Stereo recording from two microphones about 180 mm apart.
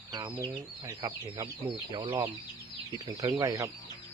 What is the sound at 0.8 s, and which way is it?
Speech, 20° right (ahead or behind).